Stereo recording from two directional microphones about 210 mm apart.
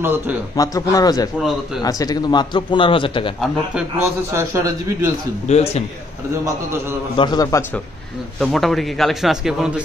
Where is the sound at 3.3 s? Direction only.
10° right (ahead or behind).